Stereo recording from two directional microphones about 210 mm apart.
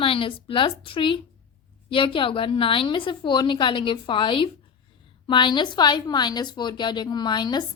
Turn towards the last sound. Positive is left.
turn(degrees=20)  # may be behind; listen again after turning